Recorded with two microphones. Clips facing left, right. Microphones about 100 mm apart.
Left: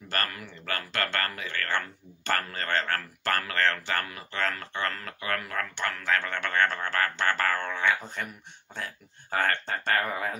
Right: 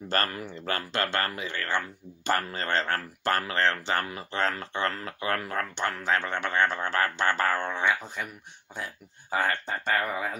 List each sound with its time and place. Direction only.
0.1 s speech: 30° right (ahead or behind)
8.2 s speech: 5° right (ahead or behind)